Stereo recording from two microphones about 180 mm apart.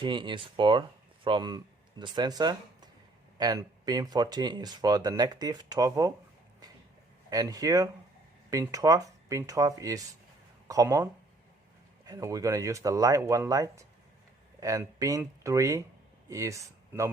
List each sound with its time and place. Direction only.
0.0 s speech: 25° right (ahead or behind)
7.3 s speech: 20° right (ahead or behind)